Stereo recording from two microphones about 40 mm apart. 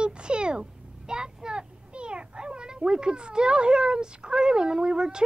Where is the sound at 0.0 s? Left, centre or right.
Right.